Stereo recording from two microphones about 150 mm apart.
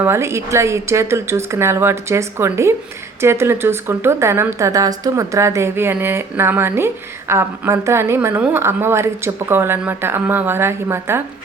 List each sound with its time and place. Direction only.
0.0 s a woman's voice: 15° right (ahead or behind)